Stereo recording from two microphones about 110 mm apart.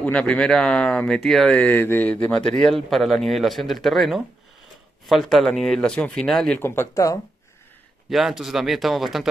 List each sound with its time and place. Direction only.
0.0 s speech: 10° left (ahead or behind)
6.6 s speech: 20° left (ahead or behind)
8.1 s speech: centre (ahead or behind)